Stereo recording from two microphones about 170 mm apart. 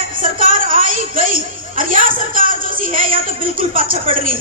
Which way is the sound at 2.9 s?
55° right (ahead or behind).